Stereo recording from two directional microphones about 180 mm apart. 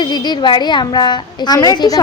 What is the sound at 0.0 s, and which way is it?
A woman's voice, 25° left (ahead or behind).